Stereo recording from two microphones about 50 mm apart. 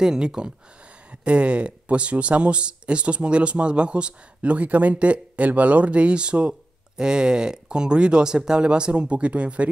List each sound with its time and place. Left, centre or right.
0.0 s speech: centre